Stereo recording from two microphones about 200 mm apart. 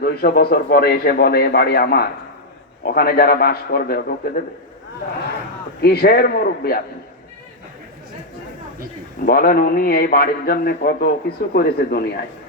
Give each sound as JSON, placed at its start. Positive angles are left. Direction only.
{"t": 0.0, "sound": "a man's voice", "side_deg": 50}
{"t": 5.8, "sound": "a man's voice", "side_deg": 50}
{"t": 9.2, "sound": "a man's voice", "side_deg": 45}